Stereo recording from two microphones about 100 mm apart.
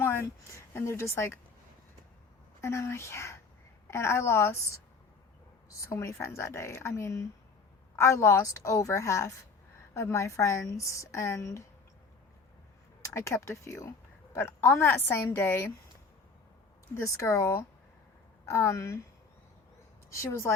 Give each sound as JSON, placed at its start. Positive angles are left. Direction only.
{"t": 0.1, "sound": "speech", "side_deg": 25}
{"t": 2.6, "sound": "a woman's voice", "side_deg": 30}
{"t": 13.0, "sound": "a woman's voice", "side_deg": 30}
{"t": 16.9, "sound": "a woman's voice", "side_deg": 30}
{"t": 20.1, "sound": "a woman's voice", "side_deg": 30}